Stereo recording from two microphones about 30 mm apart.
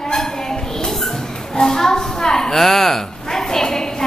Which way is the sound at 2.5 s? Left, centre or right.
Centre.